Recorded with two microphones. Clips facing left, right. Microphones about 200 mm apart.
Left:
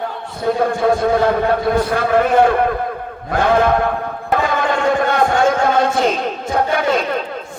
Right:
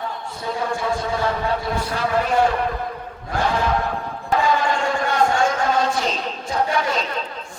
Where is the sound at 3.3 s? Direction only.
55° left (ahead or behind).